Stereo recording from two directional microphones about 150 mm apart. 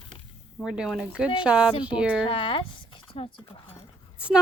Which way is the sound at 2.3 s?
35° left (ahead or behind).